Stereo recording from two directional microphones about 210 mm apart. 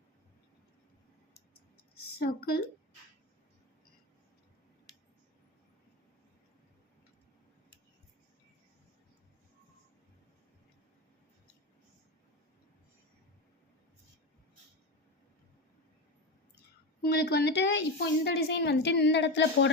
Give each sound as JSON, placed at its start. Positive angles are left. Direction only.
{"t": 2.1, "sound": "a woman's voice", "side_deg": 45}
{"t": 17.0, "sound": "a woman's voice", "side_deg": 50}